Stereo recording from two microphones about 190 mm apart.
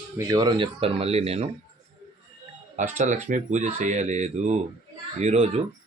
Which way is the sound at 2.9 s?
40° right (ahead or behind).